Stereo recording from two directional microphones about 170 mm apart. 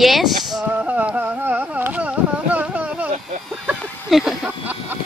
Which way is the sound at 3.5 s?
Centre (ahead or behind).